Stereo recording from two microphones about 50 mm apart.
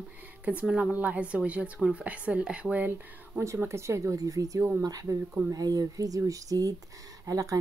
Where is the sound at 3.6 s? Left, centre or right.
Right.